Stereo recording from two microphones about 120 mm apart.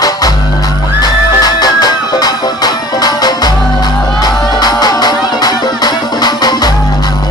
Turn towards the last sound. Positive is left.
turn(degrees=35)  # may be behind; listen again after turning